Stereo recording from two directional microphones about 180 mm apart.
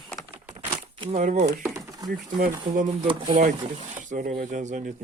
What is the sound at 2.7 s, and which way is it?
Speech, 45° right (ahead or behind).